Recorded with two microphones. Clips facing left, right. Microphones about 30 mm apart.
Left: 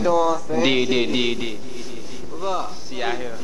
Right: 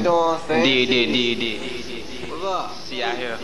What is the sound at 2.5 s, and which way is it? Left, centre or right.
Speech, centre.